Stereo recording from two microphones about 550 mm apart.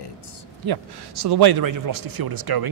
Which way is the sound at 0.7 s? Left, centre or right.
Right.